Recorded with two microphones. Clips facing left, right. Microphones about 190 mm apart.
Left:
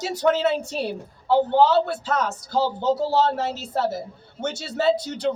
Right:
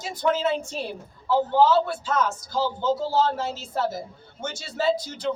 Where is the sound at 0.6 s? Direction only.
35° left (ahead or behind).